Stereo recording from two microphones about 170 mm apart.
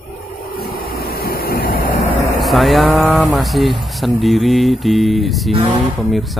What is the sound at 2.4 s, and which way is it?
Speech, centre (ahead or behind).